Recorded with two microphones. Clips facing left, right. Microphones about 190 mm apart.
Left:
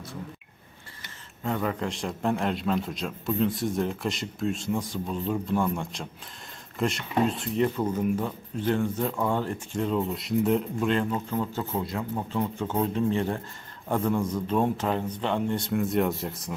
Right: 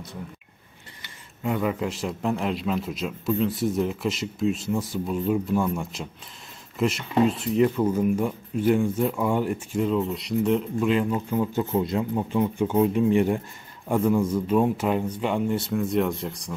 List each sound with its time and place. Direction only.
1.4 s a man's voice: 10° right (ahead or behind)